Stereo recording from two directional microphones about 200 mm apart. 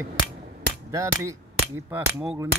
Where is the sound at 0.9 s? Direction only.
15° right (ahead or behind).